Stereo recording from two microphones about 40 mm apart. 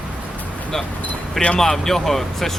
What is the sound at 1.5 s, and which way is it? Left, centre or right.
Speech, centre.